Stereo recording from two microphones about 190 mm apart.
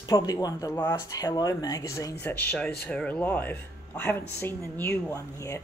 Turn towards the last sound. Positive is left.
turn(degrees=15)  # may be behind; listen again after turning